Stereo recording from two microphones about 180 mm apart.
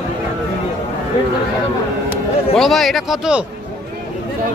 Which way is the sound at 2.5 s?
Centre (ahead or behind).